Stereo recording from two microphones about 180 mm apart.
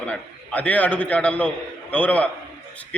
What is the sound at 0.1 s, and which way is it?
A man's voice, 10° left (ahead or behind).